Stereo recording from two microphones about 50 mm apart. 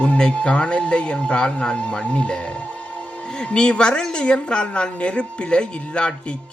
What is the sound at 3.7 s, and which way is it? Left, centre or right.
A woman's voice, left.